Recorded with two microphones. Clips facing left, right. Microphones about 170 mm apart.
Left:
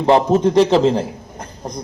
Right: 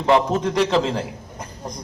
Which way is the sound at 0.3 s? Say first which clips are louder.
Left 7 dB; 30° left (ahead or behind).